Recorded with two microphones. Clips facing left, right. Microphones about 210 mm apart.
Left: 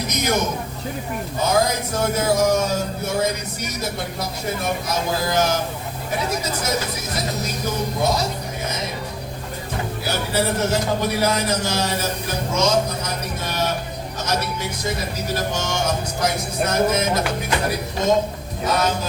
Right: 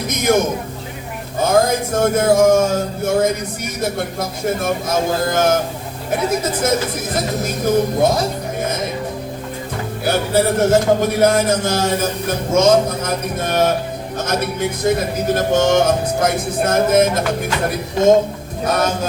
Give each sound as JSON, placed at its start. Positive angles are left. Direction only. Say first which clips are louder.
{"t": 0.3, "sound": "speech", "louder": "right 8 dB", "side_deg": -50}
{"t": 1.5, "sound": "speech", "louder": "right 7 dB", "side_deg": -50}
{"t": 10.0, "sound": "speech", "louder": "right 7 dB", "side_deg": -55}